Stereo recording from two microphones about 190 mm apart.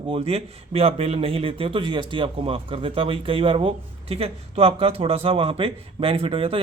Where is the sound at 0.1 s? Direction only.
30° right (ahead or behind).